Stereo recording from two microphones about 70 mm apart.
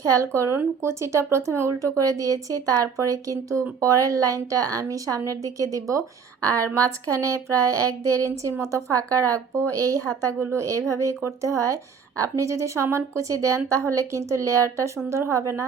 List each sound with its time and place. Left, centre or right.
0.1 s speech: right